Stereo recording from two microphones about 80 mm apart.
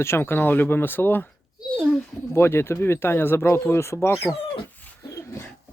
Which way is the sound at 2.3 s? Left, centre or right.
Left.